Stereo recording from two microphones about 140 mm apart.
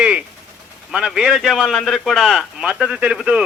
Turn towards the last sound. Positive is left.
turn(degrees=-5)  # may be behind; listen again after turning